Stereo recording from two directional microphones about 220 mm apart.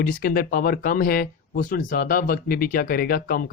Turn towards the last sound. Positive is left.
turn(degrees=40)  # may be behind; listen again after turning